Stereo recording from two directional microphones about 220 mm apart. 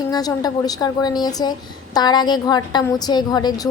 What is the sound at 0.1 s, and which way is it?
A woman's voice, 15° left (ahead or behind).